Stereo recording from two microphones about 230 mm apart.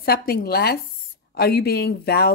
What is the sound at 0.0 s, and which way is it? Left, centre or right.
Speech, left.